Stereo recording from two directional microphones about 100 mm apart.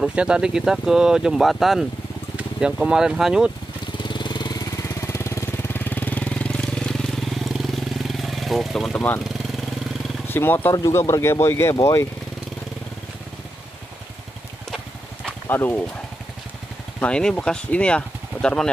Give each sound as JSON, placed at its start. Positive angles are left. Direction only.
{"t": 0.0, "sound": "speech", "side_deg": -10}
{"t": 4.0, "sound": "vehicle", "side_deg": 50}
{"t": 10.2, "sound": "speech", "side_deg": 20}
{"t": 15.4, "sound": "speech", "side_deg": 20}
{"t": 17.0, "sound": "speech", "side_deg": 10}